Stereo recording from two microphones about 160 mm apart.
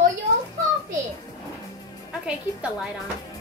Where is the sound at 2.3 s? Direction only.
5° right (ahead or behind).